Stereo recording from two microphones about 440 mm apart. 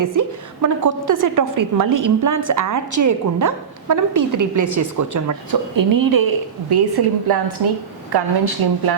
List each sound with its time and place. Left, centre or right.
0.0 s a woman's voice: right
6.7 s a woman's voice: right